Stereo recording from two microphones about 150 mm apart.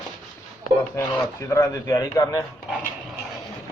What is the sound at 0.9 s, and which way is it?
Speech, 20° left (ahead or behind).